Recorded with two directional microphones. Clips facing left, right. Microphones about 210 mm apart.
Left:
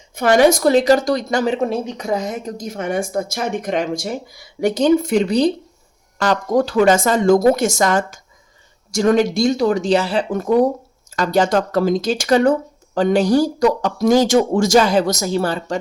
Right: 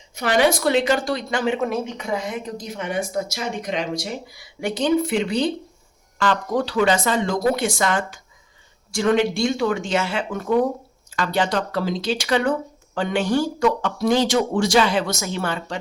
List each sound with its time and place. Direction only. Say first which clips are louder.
0.2 s speech: left 6 dB; 45° left (ahead or behind)